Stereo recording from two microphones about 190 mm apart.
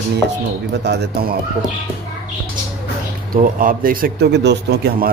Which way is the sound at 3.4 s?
45° right (ahead or behind).